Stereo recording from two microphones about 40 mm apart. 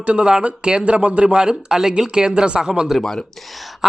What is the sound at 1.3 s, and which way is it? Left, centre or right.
Speech, centre.